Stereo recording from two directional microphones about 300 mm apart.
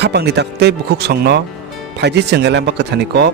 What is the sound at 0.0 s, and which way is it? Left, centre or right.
Speech, right.